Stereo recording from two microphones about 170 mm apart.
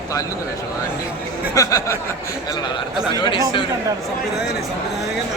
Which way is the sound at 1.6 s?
20° left (ahead or behind).